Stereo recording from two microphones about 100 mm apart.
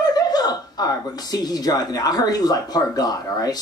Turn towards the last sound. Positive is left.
turn(degrees=40)  # may be behind; listen again after turning